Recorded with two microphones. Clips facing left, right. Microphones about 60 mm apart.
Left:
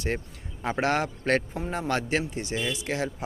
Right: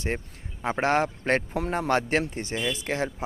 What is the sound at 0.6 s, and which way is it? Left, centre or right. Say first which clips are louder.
Speech: right 2 dB; right.